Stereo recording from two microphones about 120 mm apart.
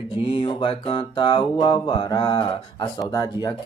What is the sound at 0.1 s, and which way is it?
Music, 45° left (ahead or behind).